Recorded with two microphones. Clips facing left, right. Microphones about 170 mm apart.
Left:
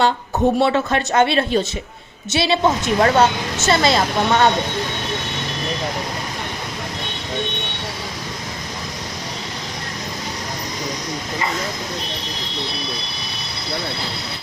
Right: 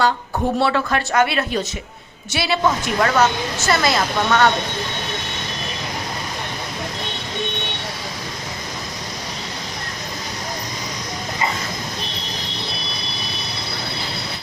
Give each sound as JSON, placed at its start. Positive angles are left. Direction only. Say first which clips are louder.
{"t": 0.0, "sound": "speech", "louder": "left 3 dB", "side_deg": 25}